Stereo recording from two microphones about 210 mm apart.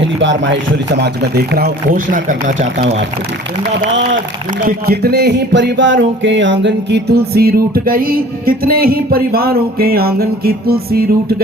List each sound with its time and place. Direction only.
0.0 s speech: 60° right (ahead or behind); by 3.0 s 35° right (ahead or behind)
4.9 s music: 50° right (ahead or behind)